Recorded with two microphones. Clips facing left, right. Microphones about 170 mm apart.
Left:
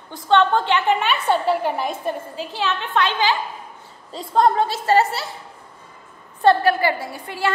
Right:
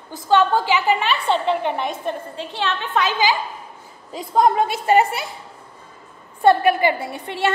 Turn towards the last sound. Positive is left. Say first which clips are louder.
# right 2 dB
turn(degrees=-25)  # may be behind; listen again after turning